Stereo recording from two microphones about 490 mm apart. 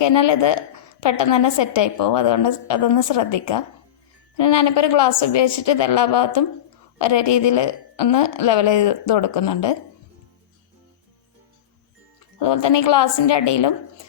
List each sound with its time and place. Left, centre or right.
0.0 s a woman's voice: left
12.4 s a woman's voice: left